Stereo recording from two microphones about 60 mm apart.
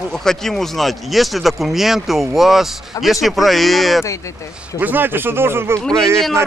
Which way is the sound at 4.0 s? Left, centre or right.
Left.